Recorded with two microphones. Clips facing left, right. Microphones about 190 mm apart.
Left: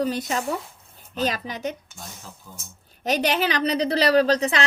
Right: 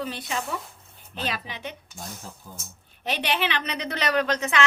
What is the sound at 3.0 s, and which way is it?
Speech, 40° left (ahead or behind).